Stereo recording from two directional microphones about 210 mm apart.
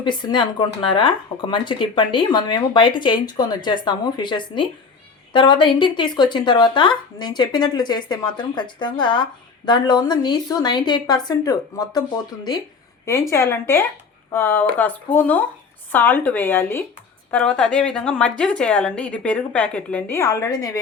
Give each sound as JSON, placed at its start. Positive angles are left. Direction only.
{"t": 0.0, "sound": "speech", "side_deg": 20}
{"t": 13.3, "sound": "speech", "side_deg": 15}